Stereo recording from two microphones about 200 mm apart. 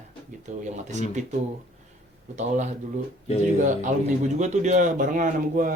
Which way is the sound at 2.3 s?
35° right (ahead or behind).